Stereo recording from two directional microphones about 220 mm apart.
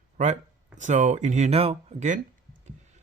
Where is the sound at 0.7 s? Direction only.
35° right (ahead or behind).